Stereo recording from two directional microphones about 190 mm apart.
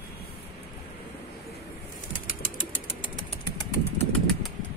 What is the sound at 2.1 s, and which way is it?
Bird flight, 45° left (ahead or behind).